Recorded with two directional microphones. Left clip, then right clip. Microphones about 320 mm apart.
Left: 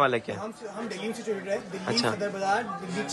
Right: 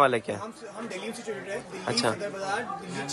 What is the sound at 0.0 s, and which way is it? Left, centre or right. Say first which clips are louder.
Speech: right 2 dB; centre.